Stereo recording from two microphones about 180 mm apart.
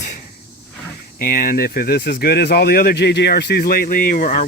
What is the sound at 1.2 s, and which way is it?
Speech, 50° left (ahead or behind).